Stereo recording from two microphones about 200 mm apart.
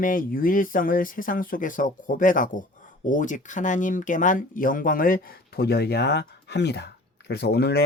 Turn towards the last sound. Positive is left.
turn(degrees=55)  # may be behind; listen again after turning